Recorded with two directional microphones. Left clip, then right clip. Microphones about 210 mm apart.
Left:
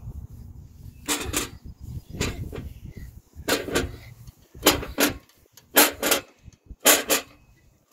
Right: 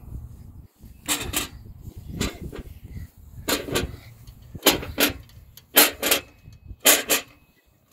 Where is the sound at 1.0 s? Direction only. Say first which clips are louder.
Even; 45° right (ahead or behind).